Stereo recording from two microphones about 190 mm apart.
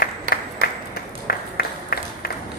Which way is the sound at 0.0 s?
50° left (ahead or behind).